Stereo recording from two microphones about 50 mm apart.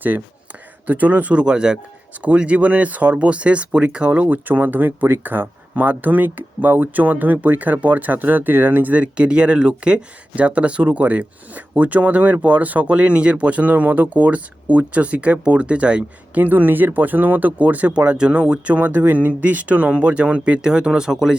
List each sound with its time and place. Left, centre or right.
0.9 s speech: right
1.4 s speech: centre
16.4 s speech: right; by 21.3 s centre